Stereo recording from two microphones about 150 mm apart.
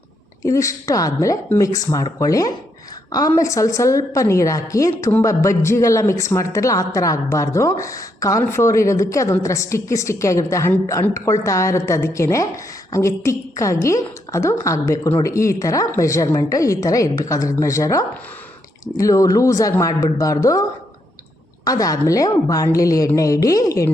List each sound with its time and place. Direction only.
0.4 s a woman's voice: 20° left (ahead or behind)